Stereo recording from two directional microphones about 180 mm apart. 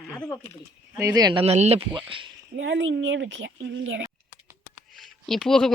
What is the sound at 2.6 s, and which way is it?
A woman's voice, 90° right.